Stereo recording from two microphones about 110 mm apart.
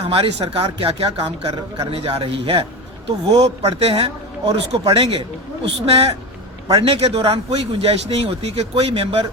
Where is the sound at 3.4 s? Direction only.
65° right (ahead or behind); by 5.2 s 50° right (ahead or behind).